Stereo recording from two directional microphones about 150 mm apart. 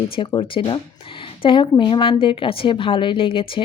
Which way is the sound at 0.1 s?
30° left (ahead or behind).